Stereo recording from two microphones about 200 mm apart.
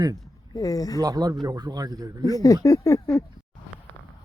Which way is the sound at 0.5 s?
15° left (ahead or behind).